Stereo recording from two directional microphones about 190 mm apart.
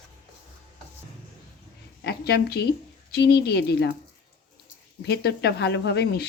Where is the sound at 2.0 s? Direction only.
60° left (ahead or behind).